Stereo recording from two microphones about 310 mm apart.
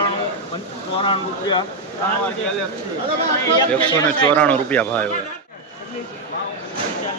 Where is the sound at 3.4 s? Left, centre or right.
Centre.